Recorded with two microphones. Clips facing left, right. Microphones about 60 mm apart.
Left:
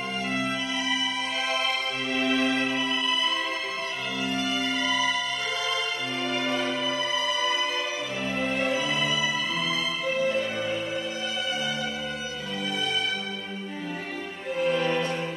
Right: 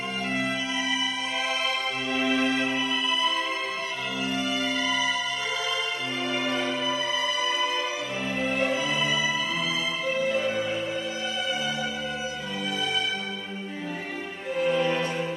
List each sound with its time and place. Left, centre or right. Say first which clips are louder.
2.1 s music: even; centre
4.2 s music: even; centre
8.5 s music: right 1 dB; centre
10.1 s music: right 1 dB; centre
14.6 s music: right 1 dB; centre